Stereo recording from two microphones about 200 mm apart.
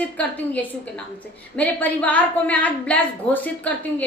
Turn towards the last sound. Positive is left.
turn(degrees=10)  # may be behind; listen again after turning